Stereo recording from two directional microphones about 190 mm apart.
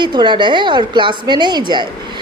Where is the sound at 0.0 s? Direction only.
25° right (ahead or behind).